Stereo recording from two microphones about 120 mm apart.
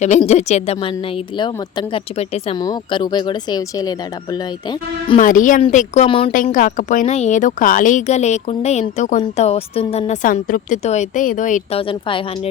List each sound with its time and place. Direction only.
0.3 s a woman's voice: 70° left (ahead or behind)
1.4 s a woman's voice: 40° left (ahead or behind)
2.1 s a woman's voice: 60° left (ahead or behind)
2.6 s speech: 35° left (ahead or behind)
5.1 s a woman's voice: 90° left
5.7 s a woman's voice: 75° left (ahead or behind)
6.1 s a woman's voice: 50° left (ahead or behind)
6.3 s a woman's voice: 90° left; by 10.0 s 55° left (ahead or behind)
10.1 s a woman's voice: 75° left (ahead or behind)
11.8 s a woman's voice: 50° left (ahead or behind)